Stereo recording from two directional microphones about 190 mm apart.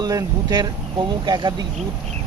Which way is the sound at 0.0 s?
20° right (ahead or behind).